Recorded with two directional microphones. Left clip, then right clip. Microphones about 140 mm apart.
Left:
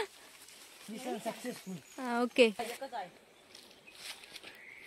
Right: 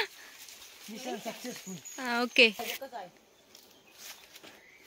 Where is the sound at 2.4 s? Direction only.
20° left (ahead or behind).